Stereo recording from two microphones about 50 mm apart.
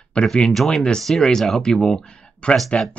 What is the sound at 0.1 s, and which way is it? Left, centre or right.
Speech, centre.